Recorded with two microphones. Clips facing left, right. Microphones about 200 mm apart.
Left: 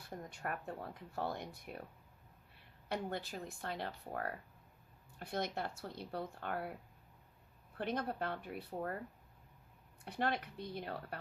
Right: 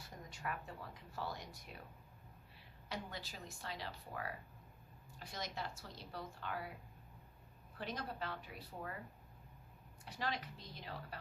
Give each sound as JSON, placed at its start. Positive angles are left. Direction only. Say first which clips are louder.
{"t": 0.0, "sound": "speech", "louder": "left 3 dB", "side_deg": 55}
{"t": 7.8, "sound": "speech", "louder": "left 6 dB", "side_deg": 55}
{"t": 10.0, "sound": "speech", "louder": "left 6 dB", "side_deg": 55}